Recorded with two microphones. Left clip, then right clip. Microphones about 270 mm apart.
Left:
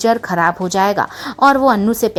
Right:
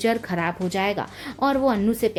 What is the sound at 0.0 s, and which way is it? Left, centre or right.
A woman's voice, centre.